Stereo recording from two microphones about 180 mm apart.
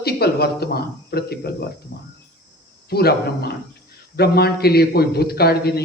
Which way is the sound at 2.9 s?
60° left (ahead or behind).